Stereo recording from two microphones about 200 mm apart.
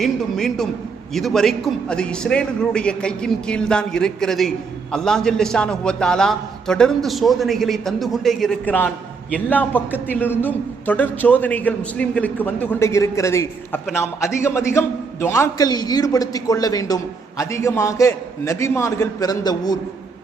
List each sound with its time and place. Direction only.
0.0 s a man's voice: centre (ahead or behind); by 19.7 s 20° left (ahead or behind)